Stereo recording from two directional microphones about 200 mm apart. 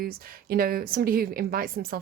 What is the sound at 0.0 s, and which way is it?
A woman's voice, 50° right (ahead or behind).